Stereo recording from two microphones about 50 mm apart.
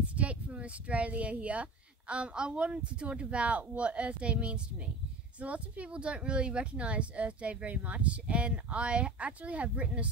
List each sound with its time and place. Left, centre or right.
0.0 s speech: right